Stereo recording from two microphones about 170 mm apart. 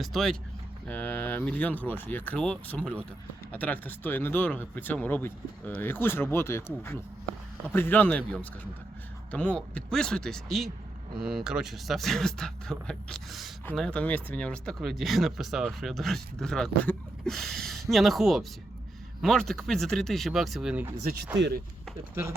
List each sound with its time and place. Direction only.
0.0 s speech: centre (ahead or behind)
22.1 s speech: 15° right (ahead or behind)